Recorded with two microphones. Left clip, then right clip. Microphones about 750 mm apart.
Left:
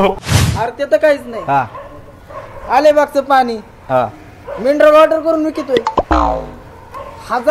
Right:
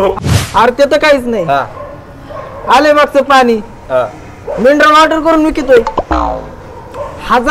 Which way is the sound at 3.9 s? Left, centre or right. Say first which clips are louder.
Right 2 dB; left.